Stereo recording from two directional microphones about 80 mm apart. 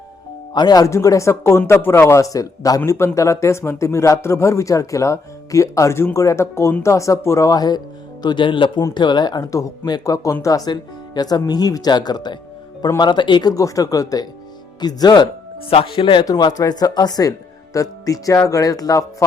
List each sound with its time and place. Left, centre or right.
0.5 s speech: left
0.9 s speech: left
8.2 s speech: left
8.9 s speech: left
9.4 s speech: left
10.7 s speech: left
13.5 s speech: left
16.0 s speech: left
16.2 s speech: left